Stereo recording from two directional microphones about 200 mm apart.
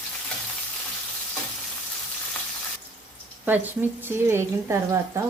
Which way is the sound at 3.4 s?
10° right (ahead or behind).